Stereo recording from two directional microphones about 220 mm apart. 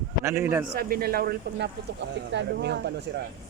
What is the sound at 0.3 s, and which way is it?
Speech, 10° right (ahead or behind).